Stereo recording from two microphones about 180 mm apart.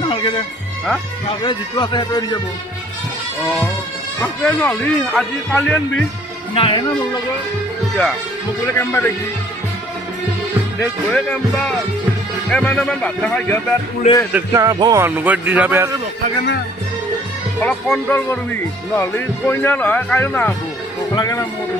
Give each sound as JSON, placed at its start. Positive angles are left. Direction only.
{"t": 0.1, "sound": "music", "side_deg": 30}
{"t": 1.4, "sound": "speech", "side_deg": 25}
{"t": 4.2, "sound": "speech", "side_deg": 10}
{"t": 6.5, "sound": "speech", "side_deg": 30}
{"t": 8.7, "sound": "speech", "side_deg": 15}
{"t": 11.1, "sound": "speech", "side_deg": 5}
{"t": 14.3, "sound": "speech", "side_deg": -15}
{"t": 17.6, "sound": "speech", "side_deg": 5}